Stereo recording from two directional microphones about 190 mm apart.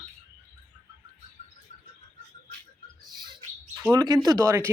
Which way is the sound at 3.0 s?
20° right (ahead or behind).